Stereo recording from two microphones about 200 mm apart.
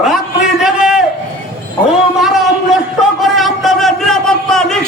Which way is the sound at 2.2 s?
Centre (ahead or behind).